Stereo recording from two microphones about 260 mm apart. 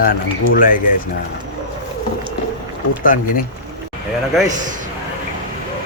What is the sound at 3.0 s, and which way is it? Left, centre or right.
Speech, left.